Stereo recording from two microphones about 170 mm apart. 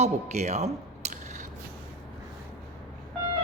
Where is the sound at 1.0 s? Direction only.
40° right (ahead or behind).